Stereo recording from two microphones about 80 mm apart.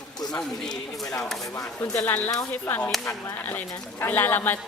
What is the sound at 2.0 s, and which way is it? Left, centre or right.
Speech, left.